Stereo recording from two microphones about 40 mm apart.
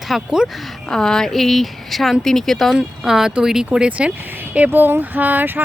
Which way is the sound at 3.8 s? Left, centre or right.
Right.